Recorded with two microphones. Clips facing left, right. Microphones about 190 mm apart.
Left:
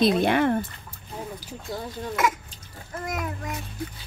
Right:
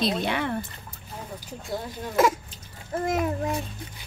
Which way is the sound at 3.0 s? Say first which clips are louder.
Right 6 dB; 30° right (ahead or behind).